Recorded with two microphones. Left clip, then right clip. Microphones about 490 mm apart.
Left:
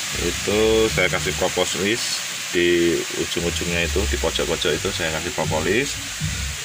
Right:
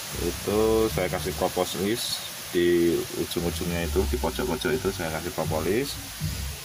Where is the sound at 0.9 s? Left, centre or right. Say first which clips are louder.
Left 7 dB; right.